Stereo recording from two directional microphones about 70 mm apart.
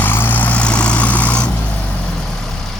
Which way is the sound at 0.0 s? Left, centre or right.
Left.